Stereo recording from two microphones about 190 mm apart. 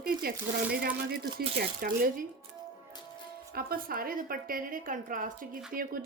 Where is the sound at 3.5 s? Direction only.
50° right (ahead or behind).